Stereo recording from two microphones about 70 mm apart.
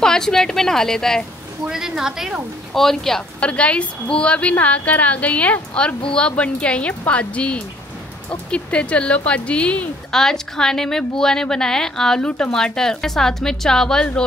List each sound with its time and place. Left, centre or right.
0.0 s a woman's voice: centre
1.7 s a woman's voice: centre
2.7 s speech: centre
3.3 s a woman's voice: centre
10.1 s a woman's voice: centre